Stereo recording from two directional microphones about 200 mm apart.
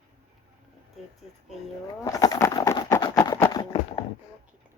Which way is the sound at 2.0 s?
15° left (ahead or behind).